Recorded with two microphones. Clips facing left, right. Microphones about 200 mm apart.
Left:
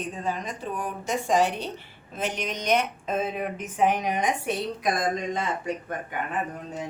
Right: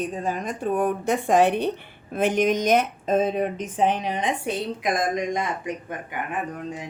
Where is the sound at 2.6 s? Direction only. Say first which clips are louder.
Right 4 dB; 40° right (ahead or behind).